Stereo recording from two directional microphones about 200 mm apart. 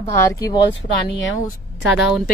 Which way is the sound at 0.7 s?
65° left (ahead or behind).